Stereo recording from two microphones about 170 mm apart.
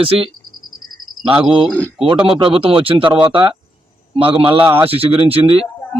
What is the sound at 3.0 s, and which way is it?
Speech, 10° right (ahead or behind).